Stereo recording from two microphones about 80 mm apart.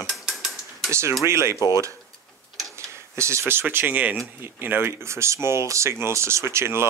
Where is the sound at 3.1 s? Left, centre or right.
Right.